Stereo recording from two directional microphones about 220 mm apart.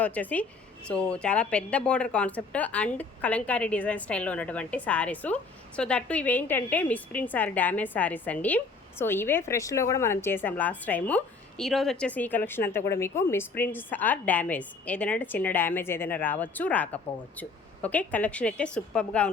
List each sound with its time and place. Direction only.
0.0 s a woman's voice: 5° left (ahead or behind)